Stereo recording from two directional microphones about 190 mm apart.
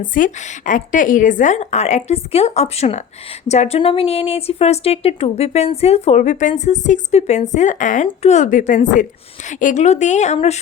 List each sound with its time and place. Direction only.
0.0 s a woman's voice: 45° left (ahead or behind)